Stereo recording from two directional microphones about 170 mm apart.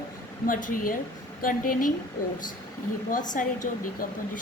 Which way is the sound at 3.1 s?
50° left (ahead or behind).